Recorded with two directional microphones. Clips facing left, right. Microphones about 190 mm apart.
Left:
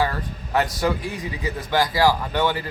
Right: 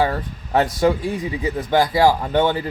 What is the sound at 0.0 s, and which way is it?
Speech, 25° right (ahead or behind).